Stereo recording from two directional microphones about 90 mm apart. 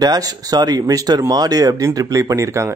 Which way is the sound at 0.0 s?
45° right (ahead or behind).